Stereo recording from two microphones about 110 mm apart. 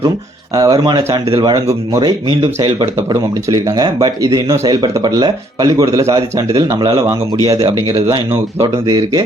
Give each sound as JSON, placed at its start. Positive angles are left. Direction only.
{"t": 0.5, "sound": "speech", "side_deg": -35}
{"t": 2.0, "sound": "speech", "side_deg": -45}
{"t": 2.8, "sound": "speech", "side_deg": -30}